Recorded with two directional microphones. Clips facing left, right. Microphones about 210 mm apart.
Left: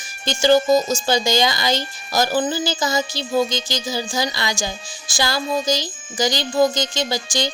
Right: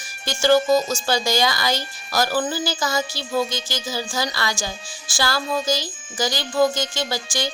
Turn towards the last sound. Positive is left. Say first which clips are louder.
# left 3 dB
turn(degrees=20)  # may be behind; listen again after turning